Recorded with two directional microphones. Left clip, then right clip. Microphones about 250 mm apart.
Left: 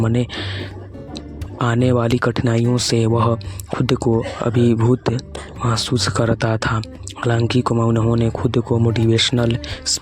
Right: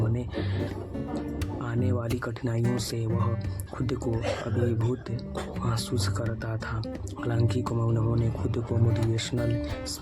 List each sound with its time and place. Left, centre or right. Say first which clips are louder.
0.1 s speech: left 11 dB; left
1.6 s speech: left 16 dB; left